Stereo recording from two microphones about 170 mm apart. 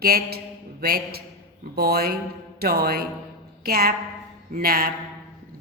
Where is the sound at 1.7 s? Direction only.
65° right (ahead or behind).